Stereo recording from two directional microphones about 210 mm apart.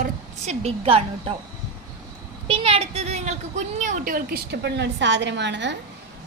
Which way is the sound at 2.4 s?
25° right (ahead or behind).